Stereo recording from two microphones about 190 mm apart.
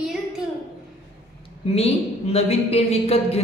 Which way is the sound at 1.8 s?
30° left (ahead or behind).